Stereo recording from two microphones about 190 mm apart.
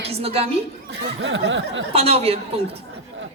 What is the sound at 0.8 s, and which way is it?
Snicker, 75° right (ahead or behind).